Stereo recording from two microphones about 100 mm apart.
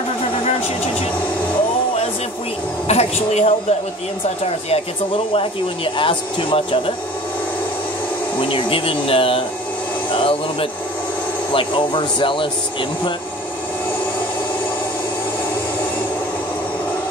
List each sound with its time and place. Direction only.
2.9 s speech: 90° left
5.9 s speech: 60° left (ahead or behind)
8.4 s speech: 60° left (ahead or behind)